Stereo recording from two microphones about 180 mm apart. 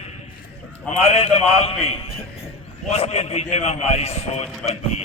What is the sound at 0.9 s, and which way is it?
Speech, 35° left (ahead or behind).